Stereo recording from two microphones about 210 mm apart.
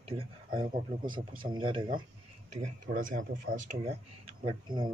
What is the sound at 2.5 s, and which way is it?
Speech, 35° right (ahead or behind).